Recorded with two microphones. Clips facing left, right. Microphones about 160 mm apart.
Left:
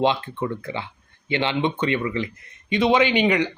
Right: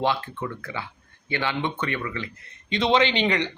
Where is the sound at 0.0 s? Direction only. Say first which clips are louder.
Left 4 dB; 20° left (ahead or behind).